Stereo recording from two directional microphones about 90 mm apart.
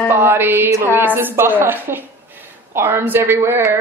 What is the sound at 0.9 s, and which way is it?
A woman's voice, 25° right (ahead or behind).